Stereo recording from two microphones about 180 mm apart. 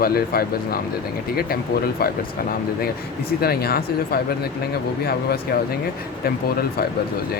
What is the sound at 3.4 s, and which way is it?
Speech, 60° left (ahead or behind).